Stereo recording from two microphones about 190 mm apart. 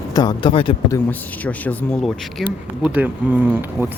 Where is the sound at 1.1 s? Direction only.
10° left (ahead or behind).